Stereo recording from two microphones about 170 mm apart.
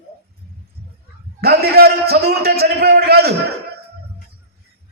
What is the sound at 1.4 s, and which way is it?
A man's voice, 70° right (ahead or behind).